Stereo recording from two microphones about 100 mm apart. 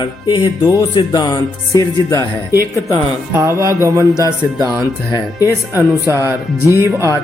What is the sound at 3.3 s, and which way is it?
Speech, 30° right (ahead or behind).